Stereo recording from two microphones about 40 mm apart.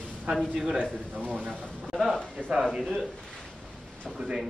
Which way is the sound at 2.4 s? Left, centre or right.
Left.